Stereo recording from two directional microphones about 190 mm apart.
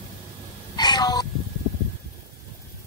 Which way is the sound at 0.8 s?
20° left (ahead or behind).